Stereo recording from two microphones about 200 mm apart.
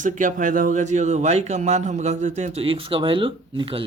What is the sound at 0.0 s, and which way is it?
Speech, 40° right (ahead or behind).